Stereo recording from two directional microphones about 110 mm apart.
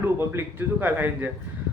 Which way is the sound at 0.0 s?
20° right (ahead or behind).